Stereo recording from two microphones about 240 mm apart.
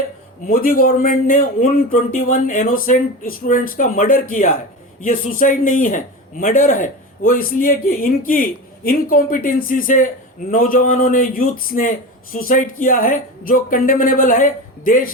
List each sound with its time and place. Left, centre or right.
0.4 s a man's voice: left